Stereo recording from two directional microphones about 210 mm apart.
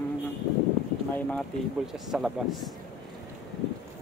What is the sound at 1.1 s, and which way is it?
Speech, 5° left (ahead or behind).